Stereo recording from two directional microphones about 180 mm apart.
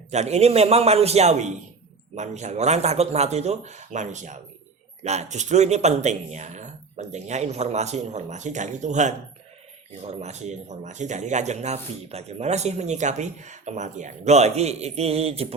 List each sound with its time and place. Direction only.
0.1 s speech: 40° right (ahead or behind)